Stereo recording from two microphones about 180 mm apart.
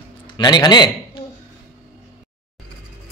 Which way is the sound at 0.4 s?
25° left (ahead or behind).